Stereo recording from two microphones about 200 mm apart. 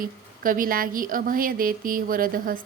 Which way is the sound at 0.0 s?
45° right (ahead or behind).